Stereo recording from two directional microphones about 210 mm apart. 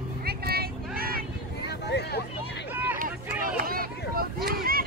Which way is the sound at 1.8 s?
55° left (ahead or behind).